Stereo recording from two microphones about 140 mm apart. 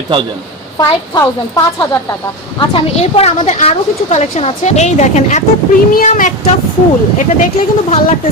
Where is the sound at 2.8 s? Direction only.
45° left (ahead or behind).